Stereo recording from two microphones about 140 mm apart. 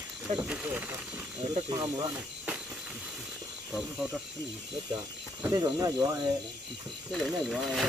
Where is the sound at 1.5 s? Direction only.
30° right (ahead or behind).